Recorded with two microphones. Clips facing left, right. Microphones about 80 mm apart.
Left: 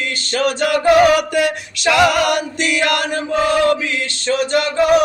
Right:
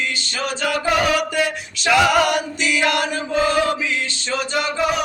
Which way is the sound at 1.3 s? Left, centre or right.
Left.